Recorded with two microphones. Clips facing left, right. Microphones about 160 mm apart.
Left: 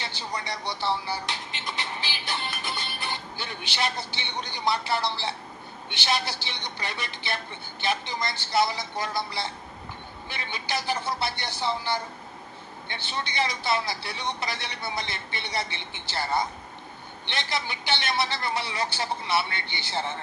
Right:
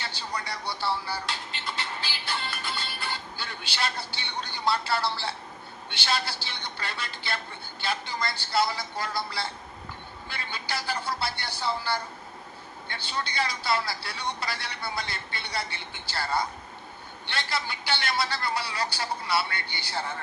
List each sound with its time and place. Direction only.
0.0 s music: 20° left (ahead or behind)
5.9 s a man's voice: 20° left (ahead or behind)